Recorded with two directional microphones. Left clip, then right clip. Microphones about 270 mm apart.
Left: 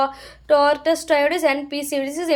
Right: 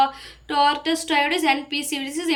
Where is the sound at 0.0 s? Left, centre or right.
Centre.